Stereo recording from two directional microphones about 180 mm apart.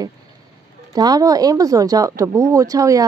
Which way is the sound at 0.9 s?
20° right (ahead or behind).